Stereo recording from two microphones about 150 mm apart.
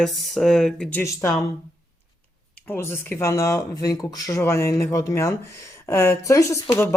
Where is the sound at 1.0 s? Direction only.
20° left (ahead or behind).